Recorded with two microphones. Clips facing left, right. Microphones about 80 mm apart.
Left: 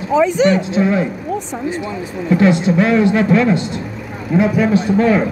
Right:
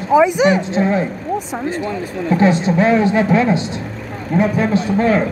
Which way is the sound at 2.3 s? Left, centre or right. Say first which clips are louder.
Left 1 dB; right.